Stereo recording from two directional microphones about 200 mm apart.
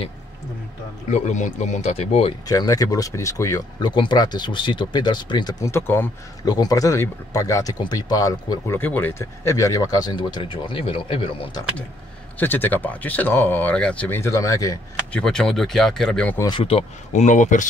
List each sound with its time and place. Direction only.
1.1 s speech: 35° left (ahead or behind)
2.4 s speech: 15° left (ahead or behind)
12.4 s speech: 10° left (ahead or behind)
15.1 s speech: 5° left (ahead or behind)
16.4 s speech: 25° left (ahead or behind)